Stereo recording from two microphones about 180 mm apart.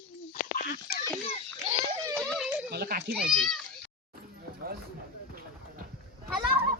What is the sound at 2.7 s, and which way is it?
Speech, 55° right (ahead or behind).